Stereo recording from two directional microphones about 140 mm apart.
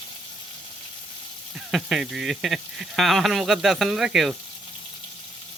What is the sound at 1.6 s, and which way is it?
Speech, 5° right (ahead or behind).